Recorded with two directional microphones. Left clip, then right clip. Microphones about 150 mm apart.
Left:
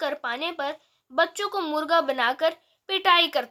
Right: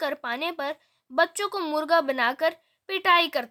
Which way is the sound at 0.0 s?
45° right (ahead or behind).